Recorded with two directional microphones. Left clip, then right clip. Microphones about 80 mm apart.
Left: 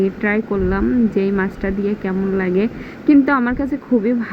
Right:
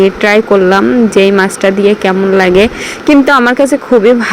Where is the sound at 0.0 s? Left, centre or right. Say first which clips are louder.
Right 12 dB; right.